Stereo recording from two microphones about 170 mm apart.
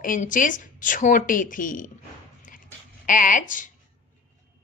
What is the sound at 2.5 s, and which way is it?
Dog, 50° left (ahead or behind).